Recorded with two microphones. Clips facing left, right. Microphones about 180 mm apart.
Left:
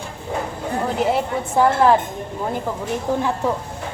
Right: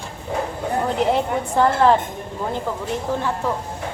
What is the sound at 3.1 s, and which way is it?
Speech, 15° left (ahead or behind).